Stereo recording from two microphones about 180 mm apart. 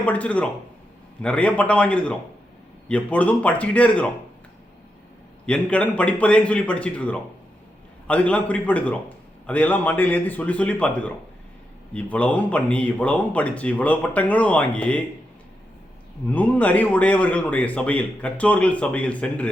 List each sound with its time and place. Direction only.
0.0 s speech: 10° left (ahead or behind)
5.5 s speech: 5° left (ahead or behind)
16.3 s speech: 10° left (ahead or behind)